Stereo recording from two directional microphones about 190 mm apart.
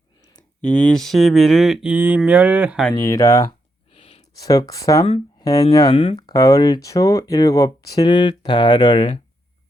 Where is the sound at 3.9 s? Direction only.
30° left (ahead or behind).